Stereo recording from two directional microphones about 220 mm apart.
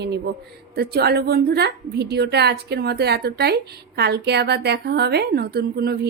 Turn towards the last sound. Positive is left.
turn(degrees=-45)  # may be behind; listen again after turning